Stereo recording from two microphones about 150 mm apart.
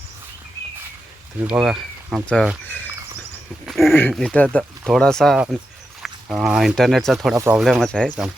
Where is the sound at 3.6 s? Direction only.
Centre (ahead or behind).